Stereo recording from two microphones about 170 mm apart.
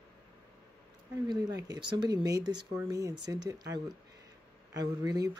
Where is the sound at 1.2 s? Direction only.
25° right (ahead or behind).